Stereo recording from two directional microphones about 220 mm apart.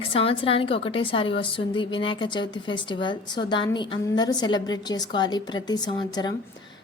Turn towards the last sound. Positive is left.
turn(degrees=20)  # may be behind; listen again after turning